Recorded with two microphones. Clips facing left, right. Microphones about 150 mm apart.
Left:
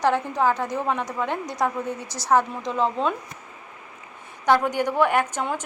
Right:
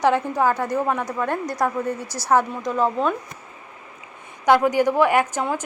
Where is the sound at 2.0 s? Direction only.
20° left (ahead or behind).